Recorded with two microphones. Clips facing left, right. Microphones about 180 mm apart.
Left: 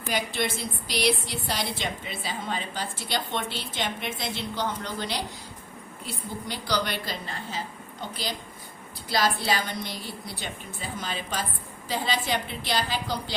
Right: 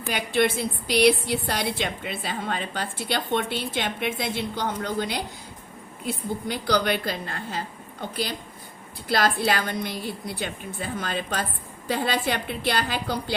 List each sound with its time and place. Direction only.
0.1 s a woman's voice: 60° right (ahead or behind)
6.5 s a woman's voice: 55° right (ahead or behind)
9.0 s a woman's voice: 55° right (ahead or behind)